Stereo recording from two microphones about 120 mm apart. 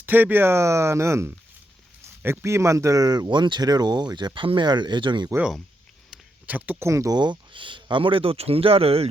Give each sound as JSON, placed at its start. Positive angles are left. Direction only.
{"t": 0.0, "sound": "speech", "side_deg": -15}
{"t": 6.1, "sound": "speech", "side_deg": -10}